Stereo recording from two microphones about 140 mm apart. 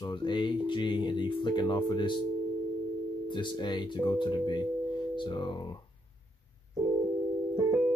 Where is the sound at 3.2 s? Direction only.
35° left (ahead or behind).